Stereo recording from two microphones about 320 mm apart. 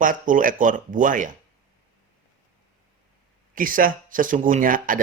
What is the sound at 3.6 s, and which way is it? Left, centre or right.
Speech, right.